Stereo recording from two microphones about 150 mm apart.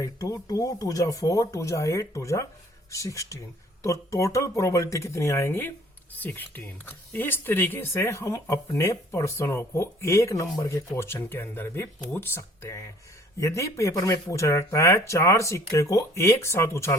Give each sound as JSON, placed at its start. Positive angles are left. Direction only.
{"t": 0.0, "sound": "speech", "side_deg": 25}